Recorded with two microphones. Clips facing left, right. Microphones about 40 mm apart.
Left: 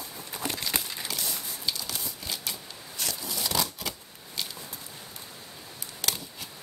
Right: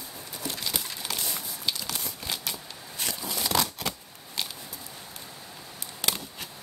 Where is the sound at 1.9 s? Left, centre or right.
Right.